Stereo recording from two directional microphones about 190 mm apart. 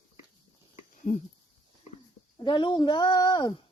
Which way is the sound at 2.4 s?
25° left (ahead or behind).